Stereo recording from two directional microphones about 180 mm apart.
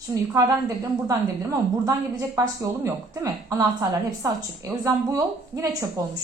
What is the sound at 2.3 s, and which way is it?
A woman's voice, 20° right (ahead or behind).